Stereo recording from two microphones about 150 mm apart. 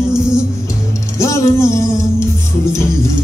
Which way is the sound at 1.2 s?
20° left (ahead or behind).